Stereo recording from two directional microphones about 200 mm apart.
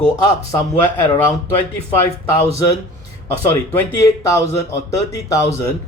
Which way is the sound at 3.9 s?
15° left (ahead or behind).